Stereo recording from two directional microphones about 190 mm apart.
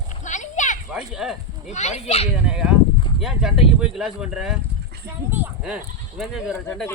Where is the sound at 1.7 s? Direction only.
35° left (ahead or behind).